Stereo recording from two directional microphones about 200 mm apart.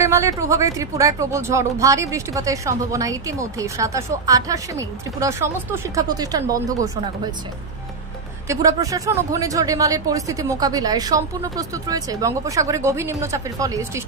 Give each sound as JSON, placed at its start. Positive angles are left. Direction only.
{"t": 0.0, "sound": "speech", "side_deg": -15}
{"t": 8.5, "sound": "speech", "side_deg": -15}